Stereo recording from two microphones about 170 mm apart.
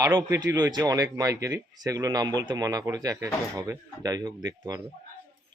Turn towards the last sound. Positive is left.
turn(degrees=-20)  # may be behind; listen again after turning